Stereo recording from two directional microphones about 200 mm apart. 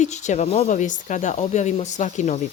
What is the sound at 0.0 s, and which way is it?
Speech, 35° left (ahead or behind).